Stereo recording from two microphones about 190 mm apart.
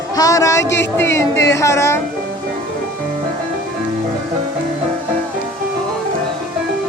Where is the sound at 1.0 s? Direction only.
15° left (ahead or behind).